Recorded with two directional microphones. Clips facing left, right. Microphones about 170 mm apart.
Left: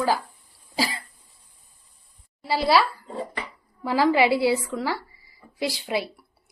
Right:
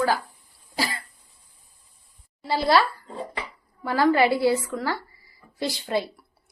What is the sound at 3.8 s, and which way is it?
Speech, 10° left (ahead or behind).